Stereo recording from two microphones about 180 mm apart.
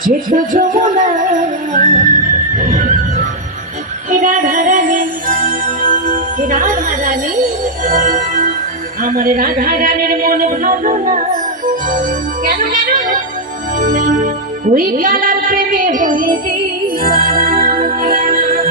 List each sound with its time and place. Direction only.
0.0 s music: 50° right (ahead or behind)
4.1 s music: 45° right (ahead or behind)
9.0 s speech: 50° right (ahead or behind)
11.6 s music: 45° right (ahead or behind)